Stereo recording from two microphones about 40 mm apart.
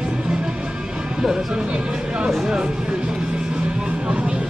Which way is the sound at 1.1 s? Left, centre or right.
Centre.